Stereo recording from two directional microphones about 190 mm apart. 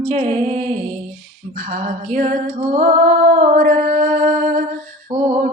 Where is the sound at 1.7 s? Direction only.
45° right (ahead or behind).